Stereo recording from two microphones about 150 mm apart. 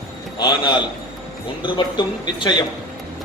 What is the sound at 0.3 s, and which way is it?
Speech, 30° left (ahead or behind).